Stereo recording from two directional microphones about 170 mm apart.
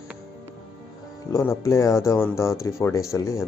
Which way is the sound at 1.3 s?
20° left (ahead or behind).